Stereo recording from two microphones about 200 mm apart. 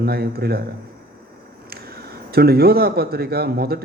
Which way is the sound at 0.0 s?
50° right (ahead or behind).